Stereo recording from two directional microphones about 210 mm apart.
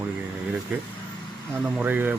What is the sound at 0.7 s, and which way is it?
Speech, 10° right (ahead or behind).